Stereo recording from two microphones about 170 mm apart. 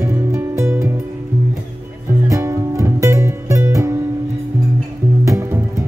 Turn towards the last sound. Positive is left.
turn(degrees=-15)  # may be behind; listen again after turning